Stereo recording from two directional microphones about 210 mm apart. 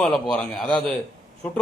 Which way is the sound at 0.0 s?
5° left (ahead or behind).